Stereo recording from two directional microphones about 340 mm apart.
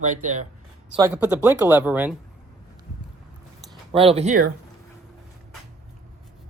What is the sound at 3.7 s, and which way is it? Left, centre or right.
Speech, centre.